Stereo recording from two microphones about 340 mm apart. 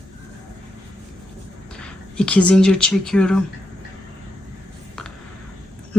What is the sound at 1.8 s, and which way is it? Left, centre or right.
Speech, centre.